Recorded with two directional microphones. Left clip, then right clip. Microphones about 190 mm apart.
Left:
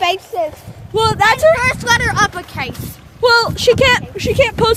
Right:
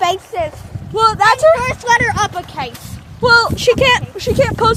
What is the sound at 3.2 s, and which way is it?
Speech, 15° left (ahead or behind).